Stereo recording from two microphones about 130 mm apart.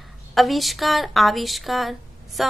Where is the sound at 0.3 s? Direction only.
Centre (ahead or behind).